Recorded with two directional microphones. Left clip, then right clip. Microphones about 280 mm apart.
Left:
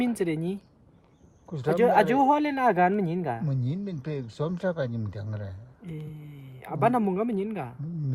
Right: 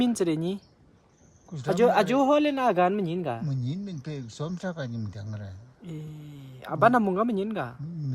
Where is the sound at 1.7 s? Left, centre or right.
Centre.